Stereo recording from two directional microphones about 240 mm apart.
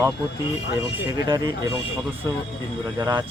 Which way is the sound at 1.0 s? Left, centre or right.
Centre.